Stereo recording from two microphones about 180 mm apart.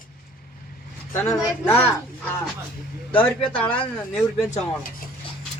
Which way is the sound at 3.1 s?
5° left (ahead or behind).